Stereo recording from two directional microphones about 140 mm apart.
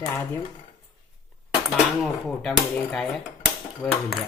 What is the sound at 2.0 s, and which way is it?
Speech, 5° left (ahead or behind).